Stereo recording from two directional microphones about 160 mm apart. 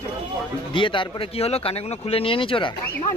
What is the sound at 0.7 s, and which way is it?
Speech, 30° left (ahead or behind).